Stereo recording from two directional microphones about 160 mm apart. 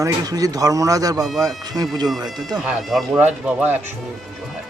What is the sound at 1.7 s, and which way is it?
Speech, 25° right (ahead or behind).